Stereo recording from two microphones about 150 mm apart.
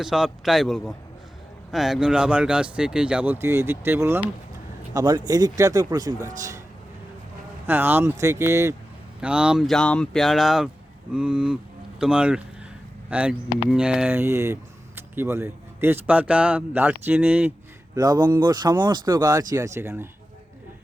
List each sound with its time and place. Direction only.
0.0 s speech: centre (ahead or behind)
4.9 s speech: 30° right (ahead or behind)
7.7 s speech: 15° right (ahead or behind)
9.2 s speech: 5° right (ahead or behind)
14.2 s speech: 20° right (ahead or behind)
17.9 s speech: 25° right (ahead or behind)